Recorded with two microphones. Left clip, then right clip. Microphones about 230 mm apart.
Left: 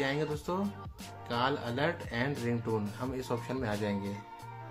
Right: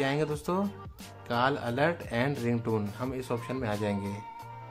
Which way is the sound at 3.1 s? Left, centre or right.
Centre.